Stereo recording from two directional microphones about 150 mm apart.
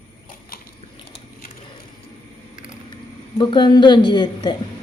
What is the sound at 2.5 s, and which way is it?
Vehicle, 5° right (ahead or behind).